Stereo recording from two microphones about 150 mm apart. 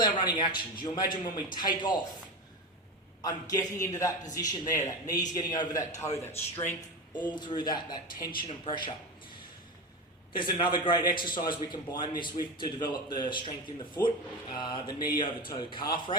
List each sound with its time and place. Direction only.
0.0 s a man's voice: 30° left (ahead or behind)
3.2 s a man's voice: 25° left (ahead or behind)
7.1 s a man's voice: 30° left (ahead or behind)
10.3 s a man's voice: 30° left (ahead or behind)